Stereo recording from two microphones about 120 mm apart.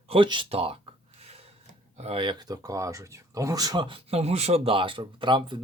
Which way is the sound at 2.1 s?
35° right (ahead or behind).